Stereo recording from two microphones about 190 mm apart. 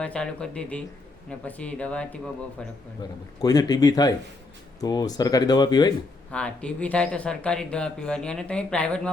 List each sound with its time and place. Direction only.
0.0 s speech: 5° left (ahead or behind)
3.0 s speech: 20° left (ahead or behind)
6.3 s speech: 5° left (ahead or behind)